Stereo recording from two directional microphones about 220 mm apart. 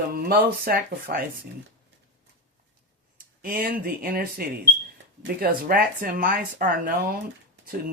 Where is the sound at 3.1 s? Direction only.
40° right (ahead or behind).